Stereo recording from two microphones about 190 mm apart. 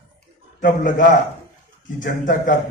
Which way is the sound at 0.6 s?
45° left (ahead or behind).